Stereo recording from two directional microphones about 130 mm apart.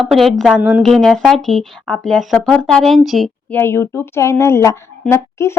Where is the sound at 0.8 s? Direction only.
5° left (ahead or behind).